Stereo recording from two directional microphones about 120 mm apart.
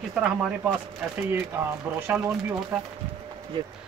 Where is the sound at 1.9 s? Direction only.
10° right (ahead or behind).